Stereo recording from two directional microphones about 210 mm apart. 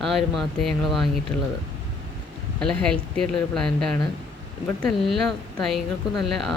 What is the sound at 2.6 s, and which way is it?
Speech, 5° left (ahead or behind).